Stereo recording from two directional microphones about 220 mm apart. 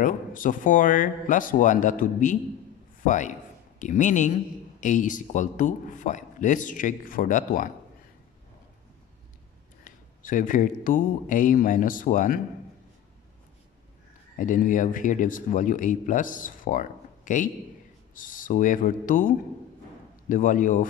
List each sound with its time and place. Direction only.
0.0 s speech: 40° left (ahead or behind)
9.8 s speech: 35° left (ahead or behind)
14.4 s speech: 35° left (ahead or behind)